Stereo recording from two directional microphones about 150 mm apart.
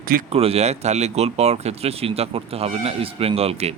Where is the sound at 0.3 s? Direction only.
45° right (ahead or behind).